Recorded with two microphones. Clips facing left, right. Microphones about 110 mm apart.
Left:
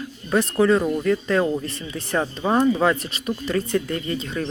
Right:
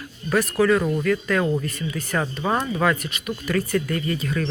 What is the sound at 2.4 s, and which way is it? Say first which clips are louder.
Speech: left 4 dB; 20° left (ahead or behind).